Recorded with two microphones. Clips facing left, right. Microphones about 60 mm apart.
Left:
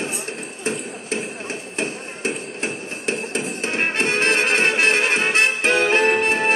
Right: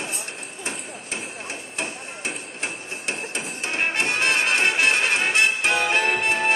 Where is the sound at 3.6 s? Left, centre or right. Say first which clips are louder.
Left 1 dB; left.